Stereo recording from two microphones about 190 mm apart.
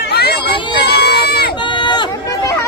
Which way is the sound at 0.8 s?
60° left (ahead or behind).